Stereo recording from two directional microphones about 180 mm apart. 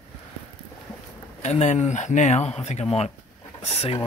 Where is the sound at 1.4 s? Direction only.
40° left (ahead or behind).